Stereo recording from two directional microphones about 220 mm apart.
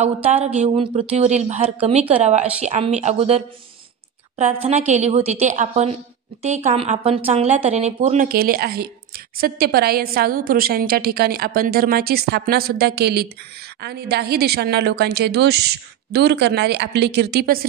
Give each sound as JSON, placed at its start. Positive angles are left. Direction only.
{"t": 0.0, "sound": "a woman's voice", "side_deg": -30}
{"t": 4.6, "sound": "a woman's voice", "side_deg": -30}